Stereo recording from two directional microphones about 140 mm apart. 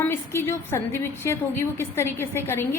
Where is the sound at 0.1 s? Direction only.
15° left (ahead or behind).